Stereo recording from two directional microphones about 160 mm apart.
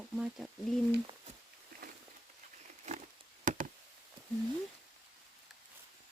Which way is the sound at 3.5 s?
55° right (ahead or behind).